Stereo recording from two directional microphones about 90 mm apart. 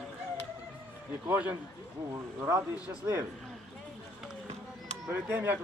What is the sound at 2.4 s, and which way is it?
Speech, 25° right (ahead or behind).